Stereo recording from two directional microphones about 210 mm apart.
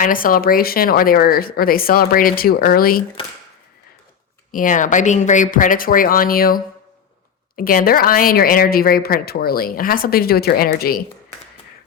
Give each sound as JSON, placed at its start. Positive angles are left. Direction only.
{"t": 0.0, "sound": "a woman's voice", "side_deg": 40}
{"t": 4.5, "sound": "a woman's voice", "side_deg": 40}